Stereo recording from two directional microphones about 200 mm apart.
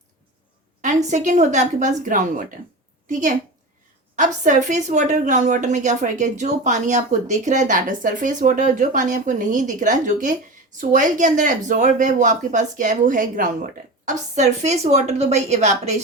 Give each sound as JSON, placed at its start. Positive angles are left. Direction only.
{"t": 1.0, "sound": "a woman's voice", "side_deg": -35}